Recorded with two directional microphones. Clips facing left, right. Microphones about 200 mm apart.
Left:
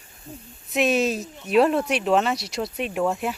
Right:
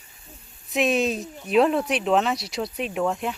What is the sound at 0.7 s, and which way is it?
Speech, centre (ahead or behind).